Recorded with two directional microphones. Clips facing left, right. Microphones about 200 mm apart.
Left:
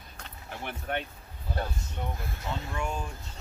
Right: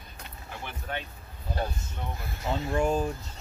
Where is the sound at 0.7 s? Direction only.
55° left (ahead or behind).